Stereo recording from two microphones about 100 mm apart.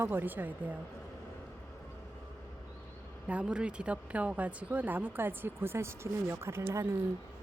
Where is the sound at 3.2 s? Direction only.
10° right (ahead or behind); by 6.8 s 25° right (ahead or behind).